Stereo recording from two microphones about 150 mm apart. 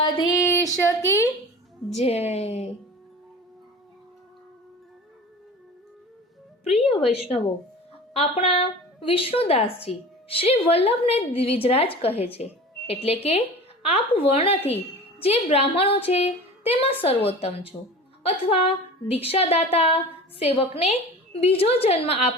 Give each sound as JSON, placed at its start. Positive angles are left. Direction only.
{"t": 0.0, "sound": "a sound", "side_deg": 30}
{"t": 0.4, "sound": "speech", "side_deg": 20}
{"t": 1.9, "sound": "speech", "side_deg": 45}
{"t": 7.1, "sound": "a woman's voice", "side_deg": 40}